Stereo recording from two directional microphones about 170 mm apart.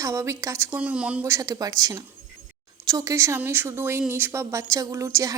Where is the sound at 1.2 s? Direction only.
20° right (ahead or behind).